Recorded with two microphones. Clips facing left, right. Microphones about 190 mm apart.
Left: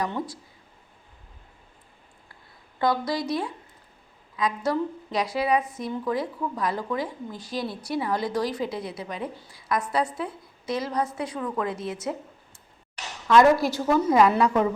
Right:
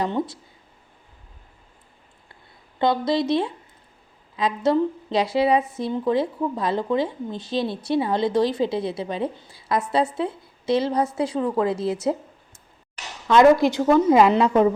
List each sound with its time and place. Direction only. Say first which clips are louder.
0.0 s speech: right 5 dB; 25° right (ahead or behind)
2.7 s speech: right 4 dB; 25° right (ahead or behind)
13.2 s speech: right 3 dB; 20° right (ahead or behind)